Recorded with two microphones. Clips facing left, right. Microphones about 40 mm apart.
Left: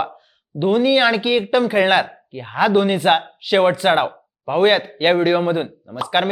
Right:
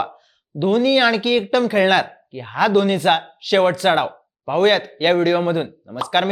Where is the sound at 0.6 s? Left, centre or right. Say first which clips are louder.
Even; centre.